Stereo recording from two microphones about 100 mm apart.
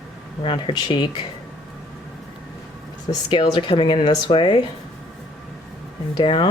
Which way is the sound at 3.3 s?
55° left (ahead or behind).